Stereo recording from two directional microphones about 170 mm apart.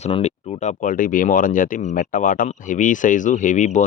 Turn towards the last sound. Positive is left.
turn(degrees=45)  # may be behind; listen again after turning